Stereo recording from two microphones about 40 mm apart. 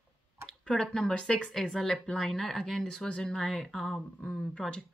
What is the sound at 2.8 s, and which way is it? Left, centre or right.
Speech, left.